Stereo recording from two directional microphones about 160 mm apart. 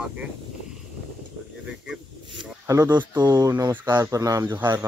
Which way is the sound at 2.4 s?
20° right (ahead or behind).